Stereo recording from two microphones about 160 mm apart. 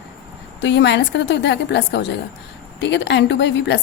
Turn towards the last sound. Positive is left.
turn(degrees=90)